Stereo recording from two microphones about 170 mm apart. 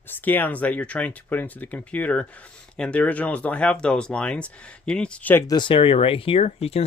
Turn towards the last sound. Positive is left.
turn(degrees=35)  # may be behind; listen again after turning